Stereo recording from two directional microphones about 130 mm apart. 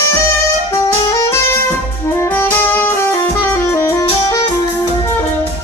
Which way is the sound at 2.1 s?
20° left (ahead or behind).